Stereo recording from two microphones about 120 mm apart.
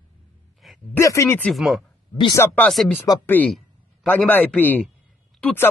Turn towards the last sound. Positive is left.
turn(degrees=15)  # may be behind; listen again after turning